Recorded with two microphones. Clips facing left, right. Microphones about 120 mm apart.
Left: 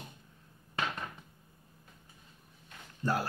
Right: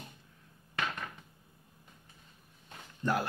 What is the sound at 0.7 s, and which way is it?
Cupboard open or close, 25° left (ahead or behind).